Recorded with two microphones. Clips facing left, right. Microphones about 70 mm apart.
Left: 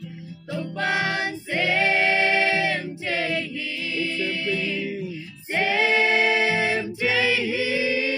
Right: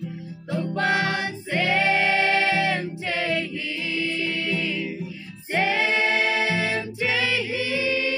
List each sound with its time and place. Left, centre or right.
0.7 s female singing: centre
4.5 s music: centre
5.7 s singing: centre
6.4 s music: left
7.0 s choir: centre